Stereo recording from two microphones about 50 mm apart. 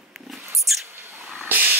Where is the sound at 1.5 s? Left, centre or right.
Right.